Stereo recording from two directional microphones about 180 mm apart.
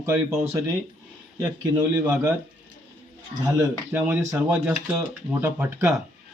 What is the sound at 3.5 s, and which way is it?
A man's voice, 10° right (ahead or behind).